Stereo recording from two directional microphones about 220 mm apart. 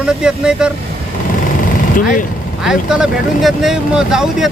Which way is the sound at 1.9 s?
35° left (ahead or behind).